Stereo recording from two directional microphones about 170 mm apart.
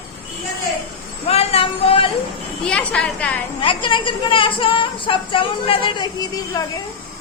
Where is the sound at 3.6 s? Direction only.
30° left (ahead or behind).